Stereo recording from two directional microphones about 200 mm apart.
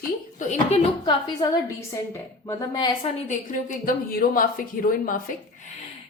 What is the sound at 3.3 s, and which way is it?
A woman's voice, 40° left (ahead or behind).